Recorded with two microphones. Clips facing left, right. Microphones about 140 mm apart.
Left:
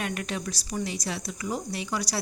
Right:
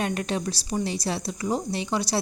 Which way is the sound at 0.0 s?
30° right (ahead or behind).